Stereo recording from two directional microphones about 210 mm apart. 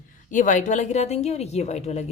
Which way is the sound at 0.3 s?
35° left (ahead or behind).